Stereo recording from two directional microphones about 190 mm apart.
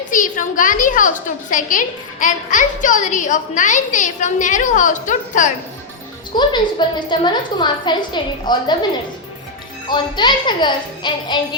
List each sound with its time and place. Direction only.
0.0 s a woman's voice: 45° left (ahead or behind)
6.3 s a woman's voice: 25° left (ahead or behind)
9.9 s a woman's voice: 25° left (ahead or behind)